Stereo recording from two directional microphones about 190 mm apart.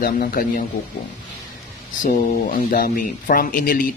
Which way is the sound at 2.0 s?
45° left (ahead or behind).